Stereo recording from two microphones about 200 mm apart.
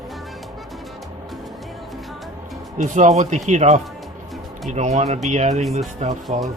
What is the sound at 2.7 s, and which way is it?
Speech, 35° right (ahead or behind).